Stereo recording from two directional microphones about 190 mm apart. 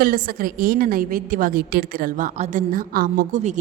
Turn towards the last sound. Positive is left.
turn(degrees=-40)  # may be behind; listen again after turning